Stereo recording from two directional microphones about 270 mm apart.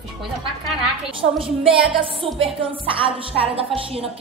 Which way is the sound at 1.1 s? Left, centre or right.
Centre.